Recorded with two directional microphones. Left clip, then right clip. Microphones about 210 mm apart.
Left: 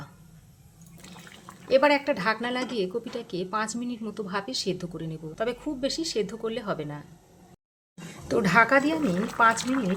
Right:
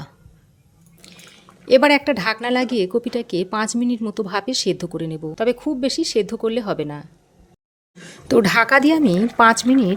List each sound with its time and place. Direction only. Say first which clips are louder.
1.6 s a woman's voice: right 7 dB; 40° right (ahead or behind)